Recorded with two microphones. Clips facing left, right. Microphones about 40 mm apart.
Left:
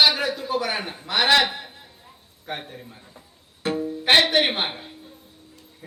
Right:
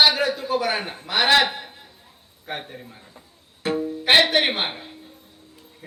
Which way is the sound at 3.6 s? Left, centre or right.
Centre.